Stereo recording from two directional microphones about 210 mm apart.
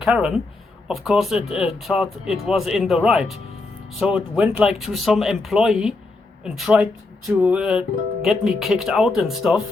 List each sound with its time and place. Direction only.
0.0 s speech: 5° right (ahead or behind)